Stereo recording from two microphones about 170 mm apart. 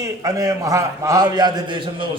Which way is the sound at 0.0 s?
20° right (ahead or behind).